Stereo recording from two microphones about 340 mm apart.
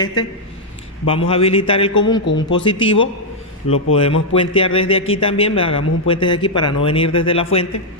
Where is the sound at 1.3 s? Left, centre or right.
Centre.